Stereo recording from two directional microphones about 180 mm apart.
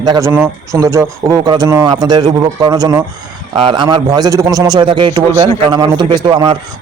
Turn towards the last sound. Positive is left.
turn(degrees=-25)  # may be behind; listen again after turning